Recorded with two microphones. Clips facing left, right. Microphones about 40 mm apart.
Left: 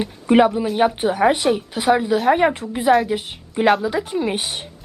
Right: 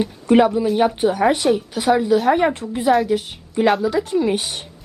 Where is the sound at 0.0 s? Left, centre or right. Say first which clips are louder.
Even; centre.